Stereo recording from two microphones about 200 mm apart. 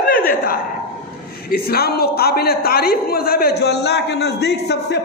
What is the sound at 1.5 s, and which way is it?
A man's voice, 50° left (ahead or behind).